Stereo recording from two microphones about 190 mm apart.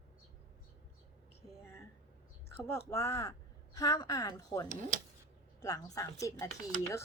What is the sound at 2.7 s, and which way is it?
Speech, 15° left (ahead or behind).